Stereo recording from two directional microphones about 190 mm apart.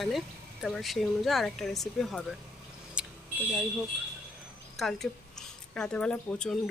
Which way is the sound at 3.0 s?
5° right (ahead or behind).